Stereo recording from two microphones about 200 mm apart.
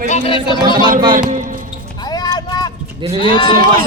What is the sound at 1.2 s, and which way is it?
Speech, 40° right (ahead or behind).